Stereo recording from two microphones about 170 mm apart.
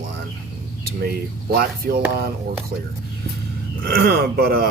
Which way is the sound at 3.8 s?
65° right (ahead or behind).